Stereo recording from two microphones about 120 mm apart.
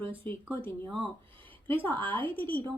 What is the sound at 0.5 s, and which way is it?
A woman's voice, 20° left (ahead or behind).